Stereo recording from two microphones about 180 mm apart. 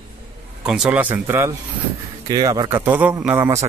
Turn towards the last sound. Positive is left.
turn(degrees=-15)  # may be behind; listen again after turning